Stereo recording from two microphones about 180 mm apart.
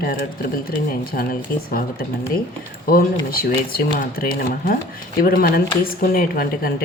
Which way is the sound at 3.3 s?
55° left (ahead or behind).